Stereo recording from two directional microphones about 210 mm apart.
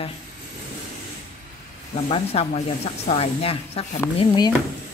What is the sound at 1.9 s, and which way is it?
Speech, 30° left (ahead or behind).